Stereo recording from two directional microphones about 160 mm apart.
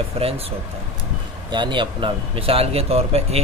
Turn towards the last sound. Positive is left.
turn(degrees=-40)  # may be behind; listen again after turning